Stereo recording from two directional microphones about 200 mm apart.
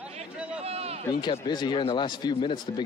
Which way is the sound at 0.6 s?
30° right (ahead or behind).